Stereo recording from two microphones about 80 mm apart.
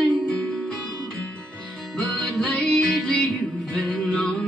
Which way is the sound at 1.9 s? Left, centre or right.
Centre.